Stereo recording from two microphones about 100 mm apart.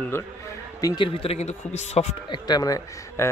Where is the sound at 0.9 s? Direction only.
65° left (ahead or behind); by 2.0 s 90° left.